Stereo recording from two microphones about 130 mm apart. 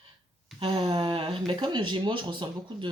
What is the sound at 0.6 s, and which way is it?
Speech, 35° right (ahead or behind).